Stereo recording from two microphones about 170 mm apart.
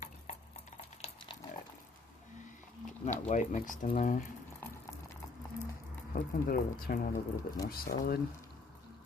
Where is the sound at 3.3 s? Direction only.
45° left (ahead or behind).